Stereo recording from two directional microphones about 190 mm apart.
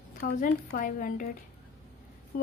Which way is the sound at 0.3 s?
45° left (ahead or behind).